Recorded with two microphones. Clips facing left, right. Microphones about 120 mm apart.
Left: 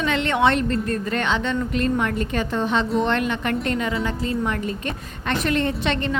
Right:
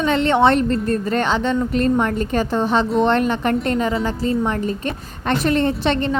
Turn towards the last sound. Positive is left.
turn(degrees=-35)  # may be behind; listen again after turning